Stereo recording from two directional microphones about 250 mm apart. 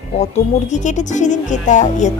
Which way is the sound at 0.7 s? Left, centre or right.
Left.